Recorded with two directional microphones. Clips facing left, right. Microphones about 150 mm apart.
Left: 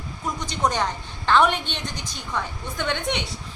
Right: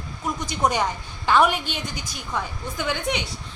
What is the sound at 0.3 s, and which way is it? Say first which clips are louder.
A woman's voice: right 1 dB; 10° right (ahead or behind).